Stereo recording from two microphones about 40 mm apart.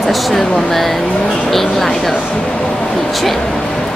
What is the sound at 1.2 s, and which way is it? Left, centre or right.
Speech, centre.